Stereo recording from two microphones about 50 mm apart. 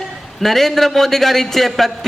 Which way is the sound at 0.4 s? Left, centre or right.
Centre.